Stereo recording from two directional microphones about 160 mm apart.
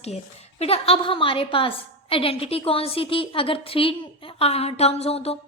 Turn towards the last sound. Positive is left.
turn(degrees=40)  # may be behind; listen again after turning